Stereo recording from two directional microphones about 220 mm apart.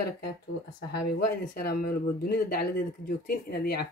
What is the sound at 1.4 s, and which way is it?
Speech, 40° left (ahead or behind).